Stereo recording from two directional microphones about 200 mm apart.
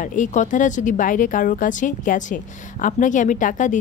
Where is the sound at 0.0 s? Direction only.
40° left (ahead or behind).